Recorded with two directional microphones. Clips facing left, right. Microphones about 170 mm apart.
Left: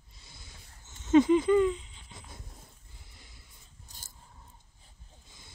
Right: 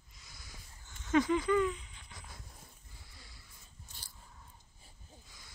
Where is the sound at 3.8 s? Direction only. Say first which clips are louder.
Left 2 dB; 45° left (ahead or behind).